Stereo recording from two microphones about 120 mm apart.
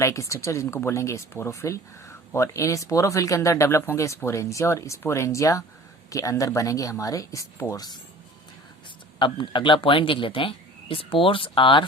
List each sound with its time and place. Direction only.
0.0 s speech: 25° left (ahead or behind)
9.1 s speech: 45° left (ahead or behind)